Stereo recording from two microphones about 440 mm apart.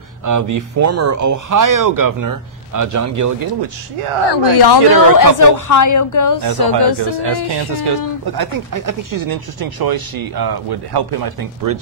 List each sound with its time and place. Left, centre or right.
0.2 s speech: right
4.3 s speech: left
5.4 s a woman's voice: left
6.6 s speech: left
7.7 s speech: right